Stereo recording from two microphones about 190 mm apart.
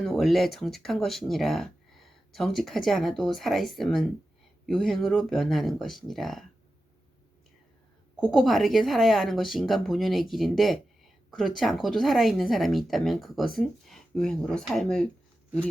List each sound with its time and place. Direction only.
0.0 s speech: centre (ahead or behind)
8.2 s speech: centre (ahead or behind)